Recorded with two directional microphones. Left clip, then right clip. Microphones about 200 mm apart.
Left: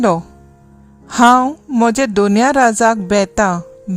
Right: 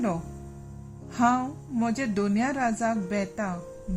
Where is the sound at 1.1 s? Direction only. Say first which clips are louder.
Left 15 dB; 60° left (ahead or behind).